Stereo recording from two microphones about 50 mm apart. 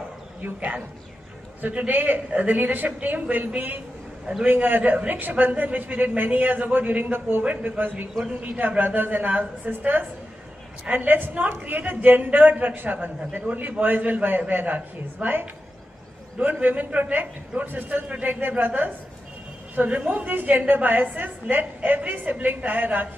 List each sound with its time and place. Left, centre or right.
0.4 s a man's voice: right
7.4 s a man's voice: right
19.7 s a woman's voice: right